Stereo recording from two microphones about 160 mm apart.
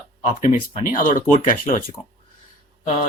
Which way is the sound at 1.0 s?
55° left (ahead or behind).